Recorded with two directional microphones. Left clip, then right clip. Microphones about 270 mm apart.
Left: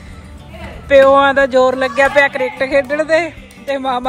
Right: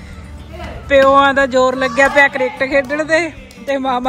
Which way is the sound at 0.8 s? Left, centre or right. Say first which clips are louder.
Left 1 dB; centre.